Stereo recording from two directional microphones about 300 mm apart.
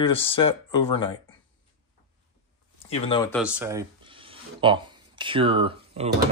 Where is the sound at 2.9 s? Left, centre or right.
Centre.